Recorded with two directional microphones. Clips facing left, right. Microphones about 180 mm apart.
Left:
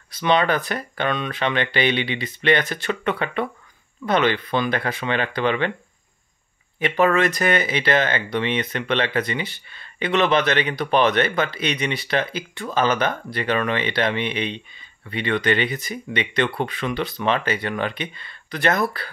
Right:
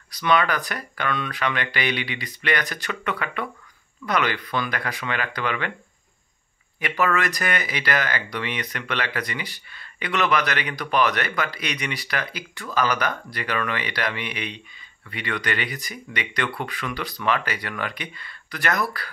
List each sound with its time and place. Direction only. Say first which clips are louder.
0.1 s speech: left 2 dB; 25° left (ahead or behind)
6.8 s speech: left 5 dB; 25° left (ahead or behind)